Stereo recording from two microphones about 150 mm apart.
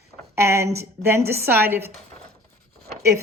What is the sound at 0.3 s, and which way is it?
A woman's voice, 20° right (ahead or behind).